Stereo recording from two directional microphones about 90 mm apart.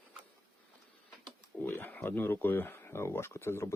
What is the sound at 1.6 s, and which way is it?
Speech, 20° left (ahead or behind).